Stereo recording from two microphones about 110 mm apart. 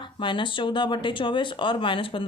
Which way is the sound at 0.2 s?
50° left (ahead or behind).